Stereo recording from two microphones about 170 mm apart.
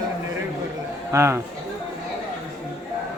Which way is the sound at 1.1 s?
15° right (ahead or behind).